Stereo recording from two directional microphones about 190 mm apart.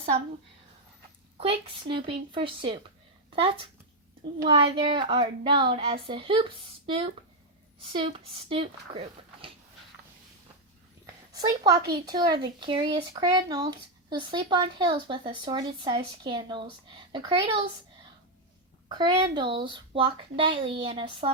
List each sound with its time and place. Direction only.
1.4 s speech: 30° right (ahead or behind)
11.0 s speech: 20° right (ahead or behind)
18.9 s speech: 20° right (ahead or behind)